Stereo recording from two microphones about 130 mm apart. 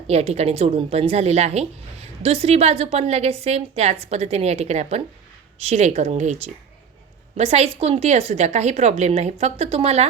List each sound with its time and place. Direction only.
0.1 s a woman's voice: 55° right (ahead or behind)